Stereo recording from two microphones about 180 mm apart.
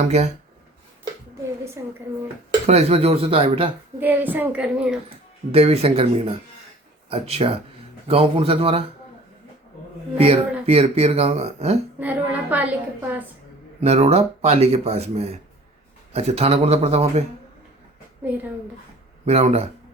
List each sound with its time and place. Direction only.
0.0 s speech: 40° right (ahead or behind)
1.8 s a woman's voice: 15° right (ahead or behind)
2.6 s speech: 35° right (ahead or behind)
4.0 s a woman's voice: 10° right (ahead or behind)
5.0 s speech: 35° right (ahead or behind)
10.2 s speech: 30° right (ahead or behind)
11.9 s a woman's voice: 10° right (ahead or behind)
13.8 s speech: 35° right (ahead or behind)
18.2 s speech: 10° right (ahead or behind)
19.2 s speech: 35° right (ahead or behind)